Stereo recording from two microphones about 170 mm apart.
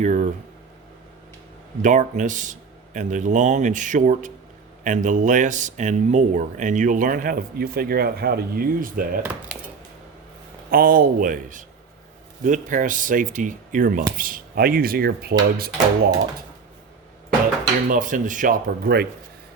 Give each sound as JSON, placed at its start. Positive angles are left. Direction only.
{"t": 0.0, "sound": "a sound", "side_deg": -45}
{"t": 1.8, "sound": "speech", "side_deg": -50}
{"t": 10.7, "sound": "speech", "side_deg": -60}
{"t": 17.8, "sound": "speech", "side_deg": -50}